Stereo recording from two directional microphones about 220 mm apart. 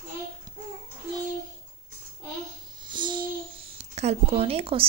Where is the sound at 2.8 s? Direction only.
20° right (ahead or behind).